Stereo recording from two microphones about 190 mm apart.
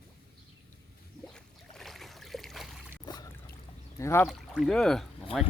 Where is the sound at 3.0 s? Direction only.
20° left (ahead or behind).